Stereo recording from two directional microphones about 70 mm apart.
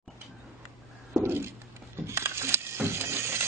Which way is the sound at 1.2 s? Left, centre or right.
Right.